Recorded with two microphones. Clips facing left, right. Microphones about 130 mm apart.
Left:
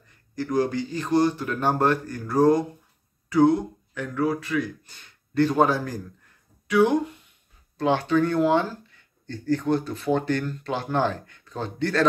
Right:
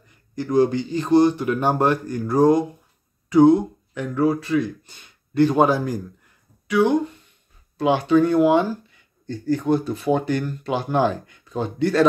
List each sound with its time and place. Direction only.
0.4 s a man's voice: 25° right (ahead or behind)
6.7 s speech: centre (ahead or behind)
7.7 s speech: 10° right (ahead or behind)